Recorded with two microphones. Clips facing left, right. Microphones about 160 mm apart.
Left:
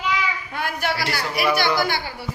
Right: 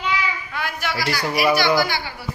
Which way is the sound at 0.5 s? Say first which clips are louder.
Left 3 dB; 50° left (ahead or behind).